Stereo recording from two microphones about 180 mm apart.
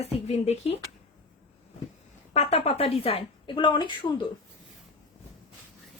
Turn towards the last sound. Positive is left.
turn(degrees=25)  # may be behind; listen again after turning